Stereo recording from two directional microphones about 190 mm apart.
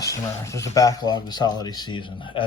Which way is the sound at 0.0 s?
15° left (ahead or behind).